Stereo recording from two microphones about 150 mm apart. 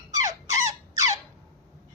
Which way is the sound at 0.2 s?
25° right (ahead or behind).